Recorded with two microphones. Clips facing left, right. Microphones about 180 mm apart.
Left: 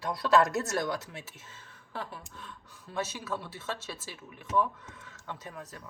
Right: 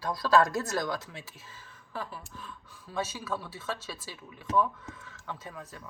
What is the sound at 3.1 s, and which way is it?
A woman's voice, 25° left (ahead or behind).